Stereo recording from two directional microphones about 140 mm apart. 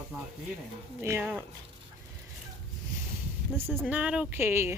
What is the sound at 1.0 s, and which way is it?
Speech, 15° right (ahead or behind).